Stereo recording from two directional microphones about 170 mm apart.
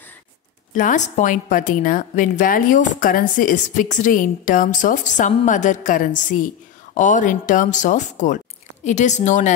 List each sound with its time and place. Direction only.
0.7 s a woman's voice: 50° left (ahead or behind)